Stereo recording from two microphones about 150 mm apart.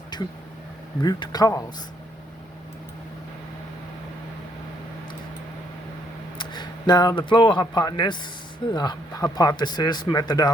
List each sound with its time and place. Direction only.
0.1 s a sound: 30° left (ahead or behind)
1.0 s speech: 25° left (ahead or behind)
6.4 s speech: 30° left (ahead or behind)